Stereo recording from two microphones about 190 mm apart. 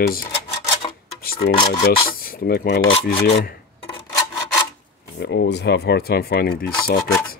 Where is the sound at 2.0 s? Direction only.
50° left (ahead or behind).